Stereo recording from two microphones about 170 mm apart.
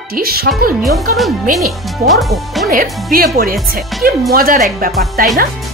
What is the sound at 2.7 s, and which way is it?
Speech, 55° right (ahead or behind).